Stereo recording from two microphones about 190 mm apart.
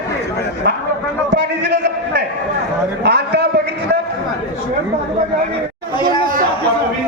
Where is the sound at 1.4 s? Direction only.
60° right (ahead or behind).